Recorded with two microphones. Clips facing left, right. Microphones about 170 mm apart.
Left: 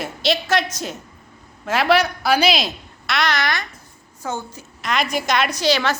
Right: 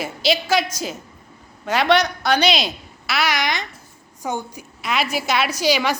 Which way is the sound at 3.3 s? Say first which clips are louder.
Even; 15° right (ahead or behind).